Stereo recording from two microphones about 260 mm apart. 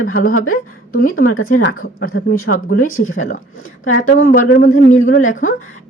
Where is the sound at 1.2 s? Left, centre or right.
Left.